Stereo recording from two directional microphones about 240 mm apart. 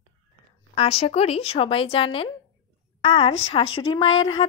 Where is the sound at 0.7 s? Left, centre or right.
Left.